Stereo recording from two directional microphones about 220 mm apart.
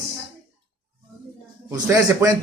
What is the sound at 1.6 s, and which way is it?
Speech, 15° right (ahead or behind).